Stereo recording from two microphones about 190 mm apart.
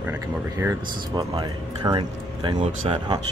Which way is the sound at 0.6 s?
10° right (ahead or behind).